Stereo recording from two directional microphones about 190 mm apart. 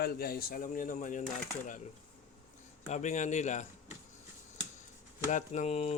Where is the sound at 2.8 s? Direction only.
40° left (ahead or behind).